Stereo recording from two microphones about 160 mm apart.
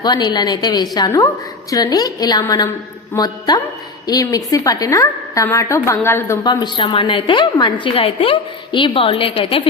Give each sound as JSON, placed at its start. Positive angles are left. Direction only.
{"t": 0.0, "sound": "a woman's voice", "side_deg": 25}